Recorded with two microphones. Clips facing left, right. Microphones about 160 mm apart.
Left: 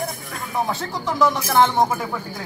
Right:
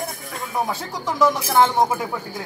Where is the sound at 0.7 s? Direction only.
10° right (ahead or behind).